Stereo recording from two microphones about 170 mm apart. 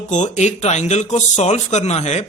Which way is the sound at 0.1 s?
45° left (ahead or behind).